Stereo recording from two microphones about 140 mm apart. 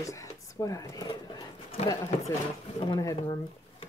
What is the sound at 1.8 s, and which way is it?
Speech, 45° left (ahead or behind).